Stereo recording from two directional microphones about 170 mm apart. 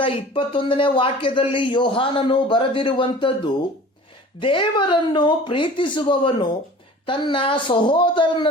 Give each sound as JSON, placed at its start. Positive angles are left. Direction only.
{"t": 0.0, "sound": "speech", "side_deg": 30}